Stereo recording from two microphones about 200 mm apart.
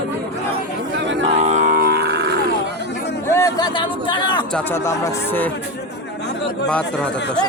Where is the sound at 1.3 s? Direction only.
35° right (ahead or behind); by 2.9 s 55° right (ahead or behind).